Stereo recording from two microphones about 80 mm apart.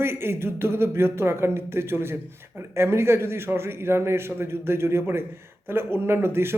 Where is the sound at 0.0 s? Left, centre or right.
Right.